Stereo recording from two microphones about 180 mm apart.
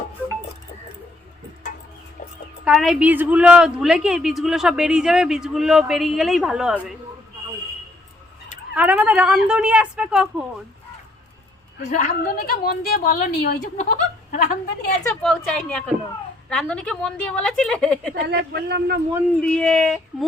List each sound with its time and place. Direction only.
2.6 s a woman's voice: centre (ahead or behind)
8.7 s speech: 10° right (ahead or behind)
11.9 s a woman's voice: 45° left (ahead or behind)
15.1 s a woman's voice: 5° left (ahead or behind)
18.1 s speech: 65° right (ahead or behind)
19.4 s a woman's voice: 5° left (ahead or behind)